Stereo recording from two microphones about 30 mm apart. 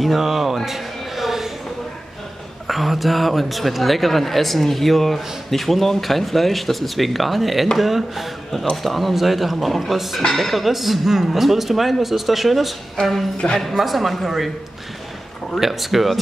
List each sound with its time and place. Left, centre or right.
0.0 s speech: centre
0.7 s a sound: centre
2.6 s speech: centre
15.6 s speech: centre